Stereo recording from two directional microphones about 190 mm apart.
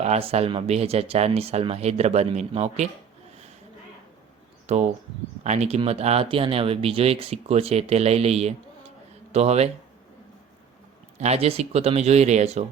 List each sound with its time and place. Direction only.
0.0 s speech: 35° right (ahead or behind)
4.6 s speech: 35° right (ahead or behind)
11.2 s speech: 35° right (ahead or behind)